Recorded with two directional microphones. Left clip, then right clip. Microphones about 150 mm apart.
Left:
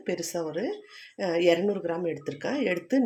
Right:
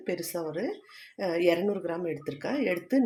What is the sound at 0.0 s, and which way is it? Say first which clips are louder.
Speech: left 2 dB; 15° left (ahead or behind).